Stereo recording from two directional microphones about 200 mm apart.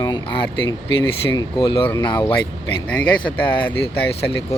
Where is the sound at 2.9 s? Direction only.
5° left (ahead or behind).